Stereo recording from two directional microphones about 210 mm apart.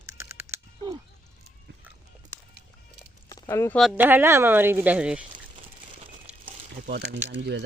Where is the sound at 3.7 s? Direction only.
5° right (ahead or behind).